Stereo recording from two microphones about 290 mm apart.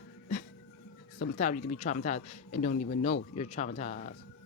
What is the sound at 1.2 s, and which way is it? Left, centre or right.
Speech, left.